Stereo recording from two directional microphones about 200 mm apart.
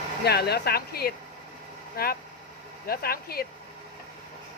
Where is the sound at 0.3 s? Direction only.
55° left (ahead or behind).